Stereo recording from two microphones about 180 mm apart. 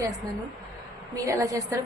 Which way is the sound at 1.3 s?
20° right (ahead or behind).